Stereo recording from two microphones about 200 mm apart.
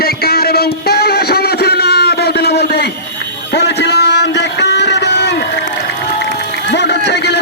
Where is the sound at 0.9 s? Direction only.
50° left (ahead or behind).